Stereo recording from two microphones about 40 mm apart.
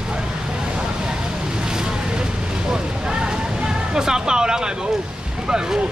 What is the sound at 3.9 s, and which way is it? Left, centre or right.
Speech, centre.